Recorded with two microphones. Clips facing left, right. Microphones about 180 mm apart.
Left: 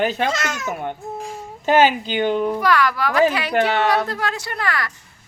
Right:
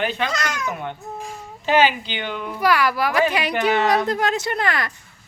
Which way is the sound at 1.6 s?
45° left (ahead or behind).